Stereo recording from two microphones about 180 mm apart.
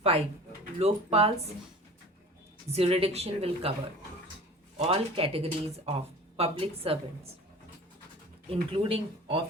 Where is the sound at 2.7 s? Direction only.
30° right (ahead or behind).